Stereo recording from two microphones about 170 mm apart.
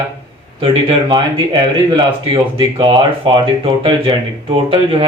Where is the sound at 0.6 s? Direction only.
35° right (ahead or behind).